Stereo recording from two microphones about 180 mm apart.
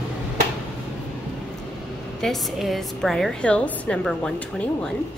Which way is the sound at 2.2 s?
Centre (ahead or behind).